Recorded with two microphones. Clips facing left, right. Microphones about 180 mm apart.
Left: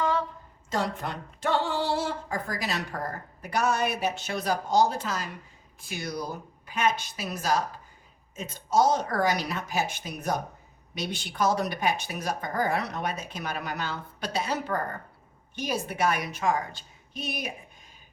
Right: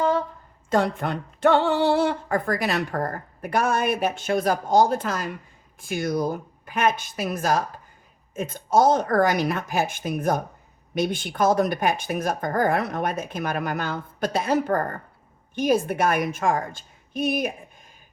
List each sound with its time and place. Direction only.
0.7 s speech: 60° right (ahead or behind)